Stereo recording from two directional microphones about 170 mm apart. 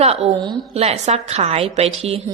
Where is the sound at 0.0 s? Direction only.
35° right (ahead or behind).